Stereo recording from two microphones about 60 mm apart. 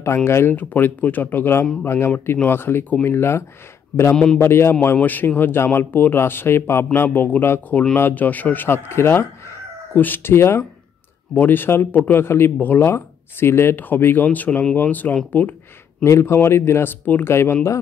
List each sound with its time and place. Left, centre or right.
0.0 s speech: left
0.6 s speech: left
4.1 s a man's voice: centre
4.4 s speech: left
5.0 s speech: left
7.1 s speech: left
8.6 s speech: left
11.3 s speech: left
16.0 s speech: left
17.3 s speech: left